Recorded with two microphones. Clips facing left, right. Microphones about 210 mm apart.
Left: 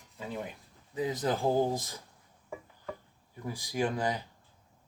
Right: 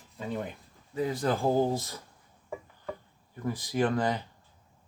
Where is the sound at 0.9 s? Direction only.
20° left (ahead or behind).